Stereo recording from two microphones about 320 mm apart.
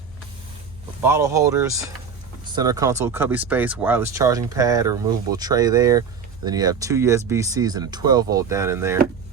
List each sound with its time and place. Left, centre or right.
1.0 s speech: centre